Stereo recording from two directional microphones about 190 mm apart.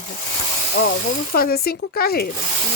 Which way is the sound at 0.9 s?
50° left (ahead or behind).